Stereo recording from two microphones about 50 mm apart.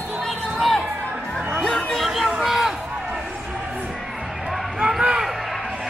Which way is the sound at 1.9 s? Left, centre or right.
Centre.